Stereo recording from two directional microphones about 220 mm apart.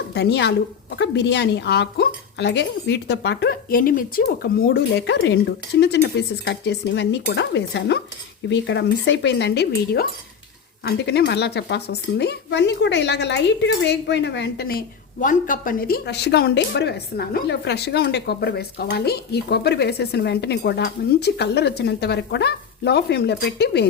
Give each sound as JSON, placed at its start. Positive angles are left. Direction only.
{"t": 0.1, "sound": "speech", "side_deg": 50}